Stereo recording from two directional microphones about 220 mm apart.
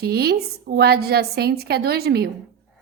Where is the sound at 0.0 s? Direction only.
45° right (ahead or behind).